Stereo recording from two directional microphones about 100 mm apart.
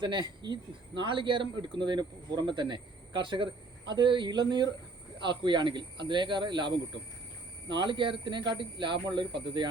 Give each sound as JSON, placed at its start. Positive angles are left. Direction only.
{"t": 0.0, "sound": "speech", "side_deg": -50}